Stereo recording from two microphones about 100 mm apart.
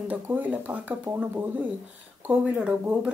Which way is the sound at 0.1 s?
15° right (ahead or behind).